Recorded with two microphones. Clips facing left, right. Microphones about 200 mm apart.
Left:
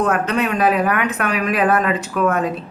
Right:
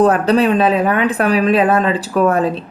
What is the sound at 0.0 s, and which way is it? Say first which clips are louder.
Speech: right 7 dB; 35° right (ahead or behind).